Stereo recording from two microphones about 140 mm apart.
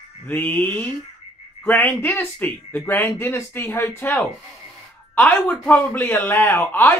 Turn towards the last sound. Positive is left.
turn(degrees=15)  # may be behind; listen again after turning